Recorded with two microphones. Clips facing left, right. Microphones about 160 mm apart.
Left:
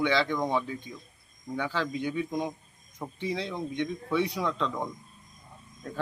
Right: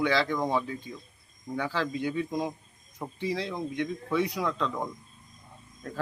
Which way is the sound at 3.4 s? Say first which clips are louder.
Even; 10° right (ahead or behind).